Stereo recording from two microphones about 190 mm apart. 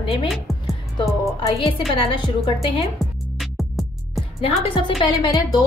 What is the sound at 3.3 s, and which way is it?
Music, centre (ahead or behind).